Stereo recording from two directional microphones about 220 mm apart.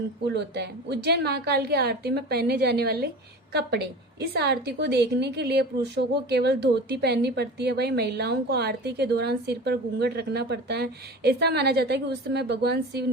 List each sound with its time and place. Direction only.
0.3 s a woman's voice: 50° right (ahead or behind)